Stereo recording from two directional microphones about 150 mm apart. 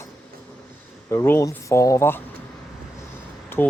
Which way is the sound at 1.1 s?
15° left (ahead or behind).